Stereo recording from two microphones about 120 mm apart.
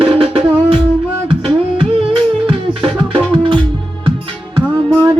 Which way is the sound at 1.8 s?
45° right (ahead or behind).